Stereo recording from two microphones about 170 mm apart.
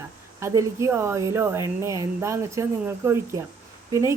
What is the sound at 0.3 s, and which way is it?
Speech, 15° right (ahead or behind).